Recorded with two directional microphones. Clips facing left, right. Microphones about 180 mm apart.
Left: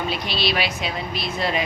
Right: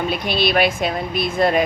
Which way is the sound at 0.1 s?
50° right (ahead or behind).